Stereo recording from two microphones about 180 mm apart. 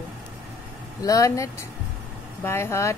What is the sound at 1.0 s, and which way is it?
Speech, 20° left (ahead or behind).